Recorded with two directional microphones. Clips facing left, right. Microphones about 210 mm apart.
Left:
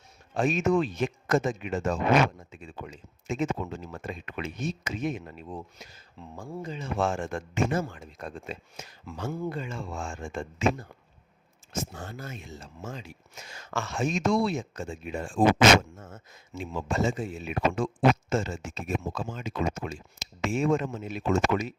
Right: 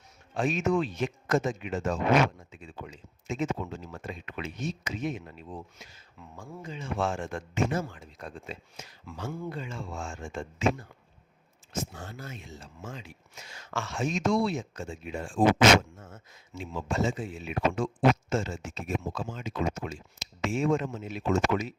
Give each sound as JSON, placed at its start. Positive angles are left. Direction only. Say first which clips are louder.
{"t": 0.3, "sound": "speech", "louder": "left 2 dB", "side_deg": 45}
{"t": 6.3, "sound": "speech", "louder": "left 4 dB", "side_deg": 35}
{"t": 11.7, "sound": "speech", "louder": "left 1 dB", "side_deg": 45}